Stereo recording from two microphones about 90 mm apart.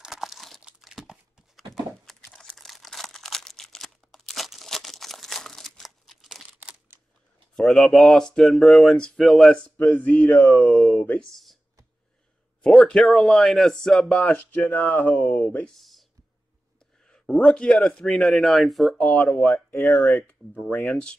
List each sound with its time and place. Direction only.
0.0 s computer keyboard: 5° right (ahead or behind)
0.6 s crumpling: 5° right (ahead or behind)
1.6 s a sound: centre (ahead or behind)
2.3 s crumpling: 5° left (ahead or behind)
7.5 s speech: 5° left (ahead or behind)
10.5 s speech: centre (ahead or behind)
11.0 s speech: 15° left (ahead or behind)
12.8 s speech: 5° left (ahead or behind)
14.7 s speech: 20° left (ahead or behind)
15.8 s a sound: centre (ahead or behind)
17.1 s speech: 10° left (ahead or behind)